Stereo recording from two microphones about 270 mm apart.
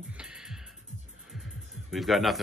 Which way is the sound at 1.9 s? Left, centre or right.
Centre.